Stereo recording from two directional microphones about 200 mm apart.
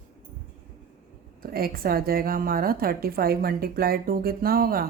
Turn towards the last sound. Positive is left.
turn(degrees=-45)  # may be behind; listen again after turning